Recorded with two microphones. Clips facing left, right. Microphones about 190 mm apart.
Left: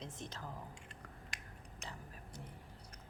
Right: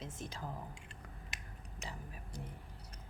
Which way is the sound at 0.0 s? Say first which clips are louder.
Right 2 dB; 10° right (ahead or behind).